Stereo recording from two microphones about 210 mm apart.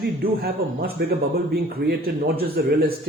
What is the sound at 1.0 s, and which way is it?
Speech, 50° right (ahead or behind).